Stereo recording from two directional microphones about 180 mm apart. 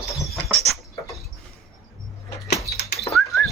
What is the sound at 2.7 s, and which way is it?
Bird, 60° left (ahead or behind).